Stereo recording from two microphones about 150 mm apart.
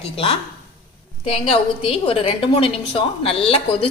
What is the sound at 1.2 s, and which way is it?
A woman's voice, 40° left (ahead or behind).